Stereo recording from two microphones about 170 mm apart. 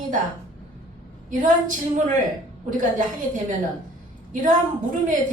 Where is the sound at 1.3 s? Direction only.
50° right (ahead or behind).